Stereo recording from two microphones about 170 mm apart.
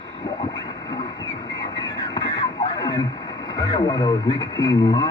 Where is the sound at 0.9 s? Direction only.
25° left (ahead or behind).